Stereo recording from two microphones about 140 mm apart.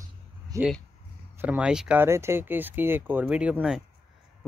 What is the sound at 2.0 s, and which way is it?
Speech, 20° right (ahead or behind).